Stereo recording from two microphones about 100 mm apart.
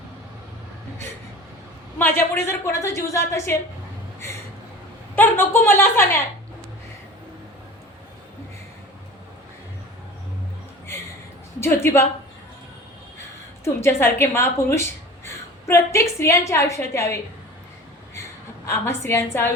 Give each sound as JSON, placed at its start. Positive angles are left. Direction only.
{"t": 2.0, "sound": "a woman's voice", "side_deg": 20}
{"t": 5.1, "sound": "a woman's voice", "side_deg": 20}
{"t": 11.6, "sound": "a woman's voice", "side_deg": 25}
{"t": 13.8, "sound": "a woman's voice", "side_deg": 25}
{"t": 18.6, "sound": "a woman's voice", "side_deg": 25}